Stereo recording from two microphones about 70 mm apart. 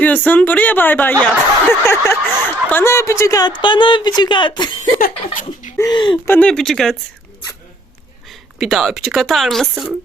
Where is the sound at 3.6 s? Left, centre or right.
Left.